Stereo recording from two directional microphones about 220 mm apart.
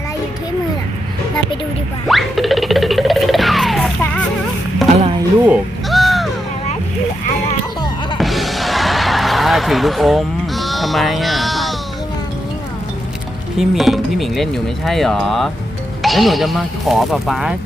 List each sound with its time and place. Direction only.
2.0 s music: centre (ahead or behind)
4.9 s music: 25° right (ahead or behind)
5.5 s music: centre (ahead or behind)
8.2 s music: centre (ahead or behind)
13.6 s speech: centre (ahead or behind)